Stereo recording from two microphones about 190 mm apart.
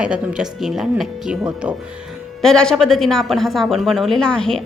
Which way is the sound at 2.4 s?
5° left (ahead or behind).